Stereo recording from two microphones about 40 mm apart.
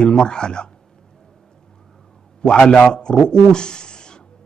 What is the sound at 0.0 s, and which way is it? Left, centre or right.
Speech, centre.